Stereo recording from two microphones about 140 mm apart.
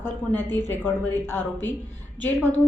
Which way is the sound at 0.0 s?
15° left (ahead or behind).